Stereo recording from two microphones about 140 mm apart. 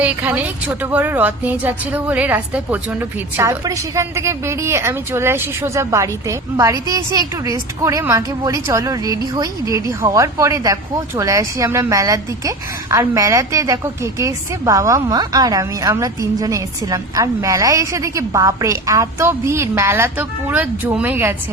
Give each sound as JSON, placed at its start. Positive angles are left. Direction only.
{"t": 0.0, "sound": "a woman's voice", "side_deg": -10}